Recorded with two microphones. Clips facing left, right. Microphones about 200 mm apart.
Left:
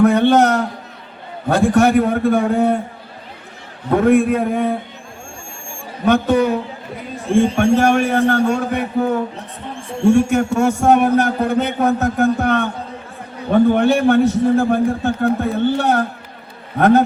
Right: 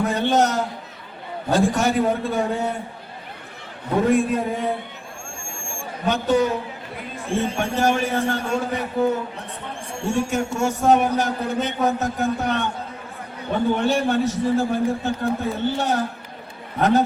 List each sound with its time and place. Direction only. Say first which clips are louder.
0.0 s a sound: left 7 dB; 60° left (ahead or behind)
1.5 s a man's voice: left 6 dB; 60° left (ahead or behind)
4.0 s a man's voice: left 6 dB; 60° left (ahead or behind)
6.1 s a man's voice: left 5 dB; 60° left (ahead or behind)
7.5 s a man's voice: left 7 dB; 60° left (ahead or behind)